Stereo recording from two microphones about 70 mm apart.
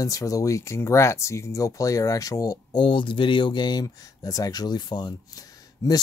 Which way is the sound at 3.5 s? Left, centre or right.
Left.